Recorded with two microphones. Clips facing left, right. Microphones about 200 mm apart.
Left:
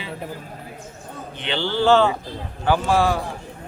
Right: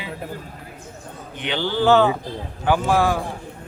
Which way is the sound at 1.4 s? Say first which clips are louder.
Right 1 dB; 15° right (ahead or behind).